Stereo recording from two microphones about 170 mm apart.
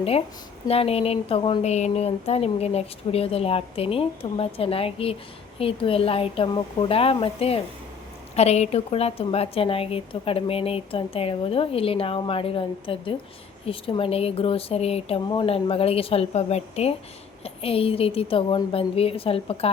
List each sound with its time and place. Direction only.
0.7 s a woman's voice: 35° left (ahead or behind)